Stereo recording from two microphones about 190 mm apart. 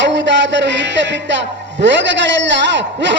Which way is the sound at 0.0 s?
70° right (ahead or behind).